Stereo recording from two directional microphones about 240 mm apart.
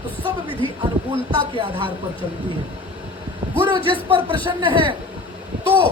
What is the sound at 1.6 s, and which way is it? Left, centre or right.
Speech, right.